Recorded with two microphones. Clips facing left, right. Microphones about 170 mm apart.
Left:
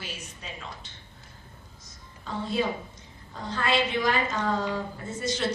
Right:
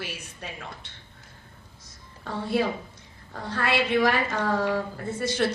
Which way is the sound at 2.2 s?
65° right (ahead or behind).